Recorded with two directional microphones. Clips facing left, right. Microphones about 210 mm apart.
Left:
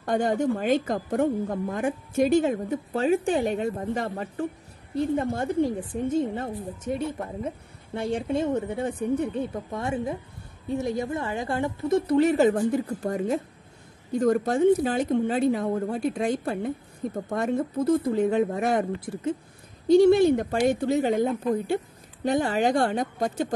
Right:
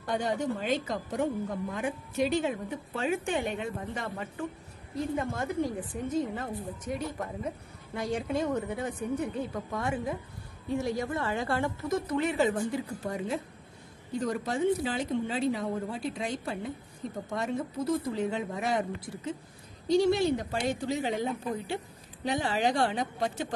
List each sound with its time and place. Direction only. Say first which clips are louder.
0.0 s a woman's voice: left 6 dB; 50° left (ahead or behind); by 12.0 s 20° left (ahead or behind)
12.1 s a woman's voice: left 8 dB; 40° left (ahead or behind)